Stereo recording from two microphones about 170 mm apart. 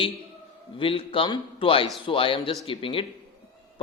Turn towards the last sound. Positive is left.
turn(degrees=30)  # may be behind; listen again after turning